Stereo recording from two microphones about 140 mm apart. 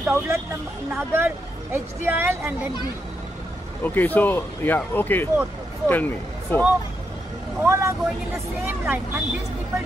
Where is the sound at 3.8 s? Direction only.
15° left (ahead or behind).